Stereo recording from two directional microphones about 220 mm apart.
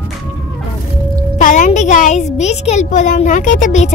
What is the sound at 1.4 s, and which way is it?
A woman's voice, 35° left (ahead or behind).